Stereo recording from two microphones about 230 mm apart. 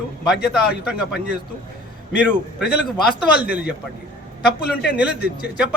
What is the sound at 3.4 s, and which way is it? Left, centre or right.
Speech, centre.